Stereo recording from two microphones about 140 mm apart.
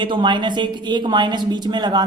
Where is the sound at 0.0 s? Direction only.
35° right (ahead or behind).